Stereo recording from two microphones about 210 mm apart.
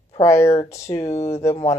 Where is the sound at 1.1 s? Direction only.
30° left (ahead or behind).